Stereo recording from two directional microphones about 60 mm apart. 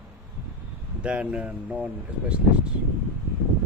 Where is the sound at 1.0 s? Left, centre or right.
Centre.